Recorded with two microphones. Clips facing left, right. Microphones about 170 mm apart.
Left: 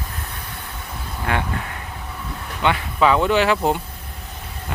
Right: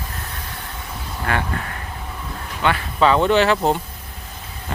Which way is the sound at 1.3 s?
20° left (ahead or behind).